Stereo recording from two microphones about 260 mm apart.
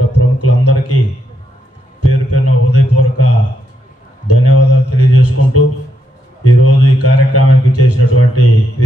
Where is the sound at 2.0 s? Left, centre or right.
Left.